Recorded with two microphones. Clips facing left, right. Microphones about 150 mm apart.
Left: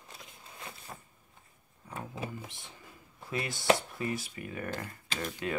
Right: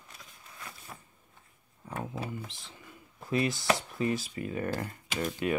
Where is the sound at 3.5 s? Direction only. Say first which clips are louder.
Left 2 dB; 25° left (ahead or behind).